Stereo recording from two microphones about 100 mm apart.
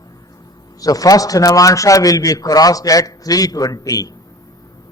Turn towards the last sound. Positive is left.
turn(degrees=35)  # may be behind; listen again after turning